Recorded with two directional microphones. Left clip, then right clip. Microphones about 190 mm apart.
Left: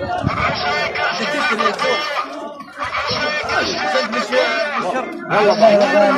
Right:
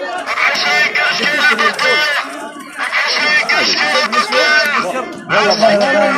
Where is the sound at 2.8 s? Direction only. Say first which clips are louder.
Right 6 dB; 60° left (ahead or behind).